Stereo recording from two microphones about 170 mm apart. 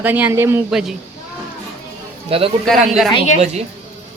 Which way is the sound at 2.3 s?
35° right (ahead or behind).